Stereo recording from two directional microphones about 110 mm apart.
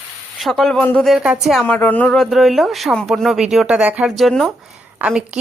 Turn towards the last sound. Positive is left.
turn(degrees=-10)  # may be behind; listen again after turning